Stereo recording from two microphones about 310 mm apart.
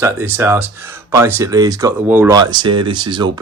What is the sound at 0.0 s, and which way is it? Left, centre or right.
Speech, centre.